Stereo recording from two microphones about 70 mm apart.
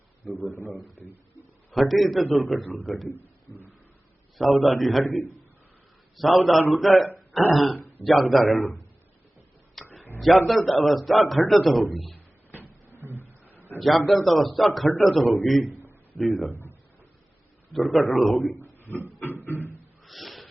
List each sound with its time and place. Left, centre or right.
0.5 s a man's voice: left
1.7 s a man's voice: centre
4.4 s a man's voice: centre
9.8 s a sound: centre
10.2 s a man's voice: centre
12.5 s cupboard open or close: right
13.7 s a man's voice: centre
16.5 s speech: left
17.7 s a man's voice: centre
18.6 s a sound: left
20.1 s a sound: centre